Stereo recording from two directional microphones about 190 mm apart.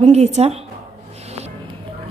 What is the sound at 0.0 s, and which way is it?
Speech, 35° right (ahead or behind).